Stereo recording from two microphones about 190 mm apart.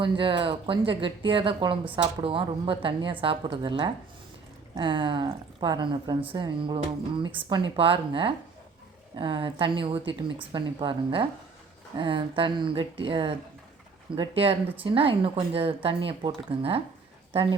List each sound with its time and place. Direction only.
0.0 s speech: 25° right (ahead or behind)